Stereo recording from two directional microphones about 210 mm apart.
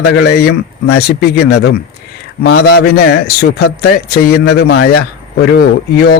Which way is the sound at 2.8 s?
50° left (ahead or behind).